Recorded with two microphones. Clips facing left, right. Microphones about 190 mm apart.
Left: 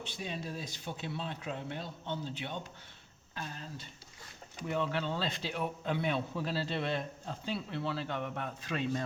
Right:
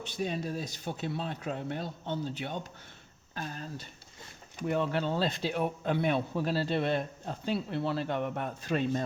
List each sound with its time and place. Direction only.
0.0 s speech: 45° right (ahead or behind)
7.5 s speech: 40° right (ahead or behind)
7.9 s speech: 50° right (ahead or behind)